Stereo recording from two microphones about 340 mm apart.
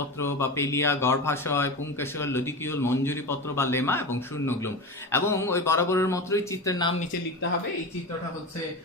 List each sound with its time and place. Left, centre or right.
0.2 s speech: centre